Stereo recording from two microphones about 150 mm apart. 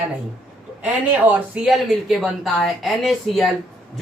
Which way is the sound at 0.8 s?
10° right (ahead or behind).